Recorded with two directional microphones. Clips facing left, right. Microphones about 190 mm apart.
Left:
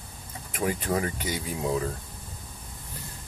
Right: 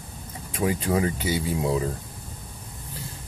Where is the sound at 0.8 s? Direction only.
20° right (ahead or behind).